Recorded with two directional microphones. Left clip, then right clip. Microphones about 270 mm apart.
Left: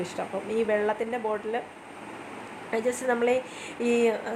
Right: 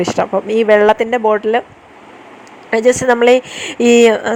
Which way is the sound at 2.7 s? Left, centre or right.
Right.